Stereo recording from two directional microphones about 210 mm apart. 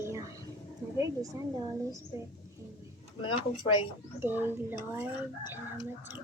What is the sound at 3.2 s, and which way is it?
Speech, 20° left (ahead or behind).